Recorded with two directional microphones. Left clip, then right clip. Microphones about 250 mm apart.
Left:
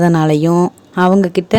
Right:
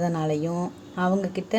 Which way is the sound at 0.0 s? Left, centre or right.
Left.